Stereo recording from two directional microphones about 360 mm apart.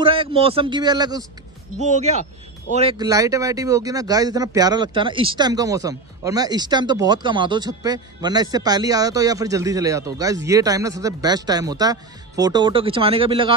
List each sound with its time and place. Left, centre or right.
0.0 s speech: centre